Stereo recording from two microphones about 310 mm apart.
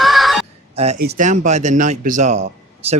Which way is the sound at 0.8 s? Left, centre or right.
Right.